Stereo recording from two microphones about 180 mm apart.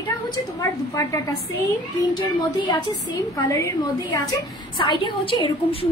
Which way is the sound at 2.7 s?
15° left (ahead or behind).